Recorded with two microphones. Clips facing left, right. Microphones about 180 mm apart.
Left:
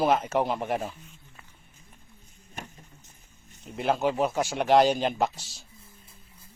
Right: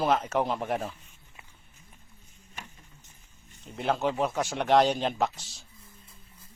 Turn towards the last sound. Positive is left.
turn(degrees=5)  # may be behind; listen again after turning